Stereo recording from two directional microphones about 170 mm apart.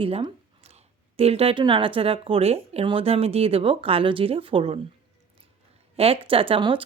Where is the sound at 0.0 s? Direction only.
30° right (ahead or behind).